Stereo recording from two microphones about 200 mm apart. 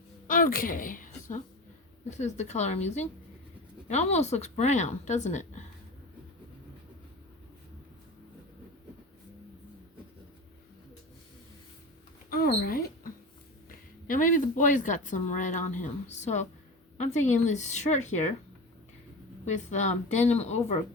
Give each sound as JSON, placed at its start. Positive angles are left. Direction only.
{"t": 0.3, "sound": "a sound", "side_deg": 45}
{"t": 2.0, "sound": "speech", "side_deg": 35}
{"t": 12.3, "sound": "mouse", "side_deg": 45}
{"t": 13.7, "sound": "a woman's voice", "side_deg": 40}
{"t": 19.5, "sound": "speech", "side_deg": 35}